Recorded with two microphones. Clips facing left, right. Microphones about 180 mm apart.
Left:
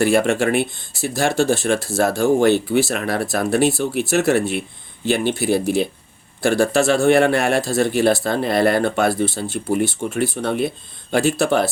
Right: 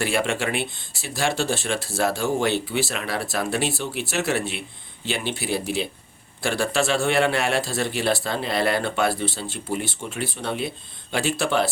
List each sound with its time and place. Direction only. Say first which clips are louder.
0.0 s speech: left 8 dB; 45° left (ahead or behind)